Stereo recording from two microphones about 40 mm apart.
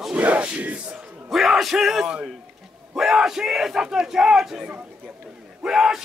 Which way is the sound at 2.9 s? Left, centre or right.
Centre.